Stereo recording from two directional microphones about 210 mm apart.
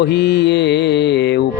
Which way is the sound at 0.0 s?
50° left (ahead or behind).